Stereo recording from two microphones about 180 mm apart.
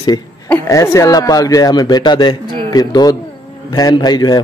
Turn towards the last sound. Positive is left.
turn(degrees=20)  # may be behind; listen again after turning